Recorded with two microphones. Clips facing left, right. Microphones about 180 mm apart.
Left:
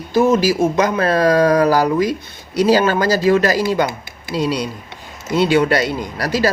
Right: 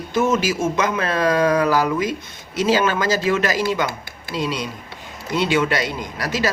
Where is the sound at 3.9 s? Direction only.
20° left (ahead or behind).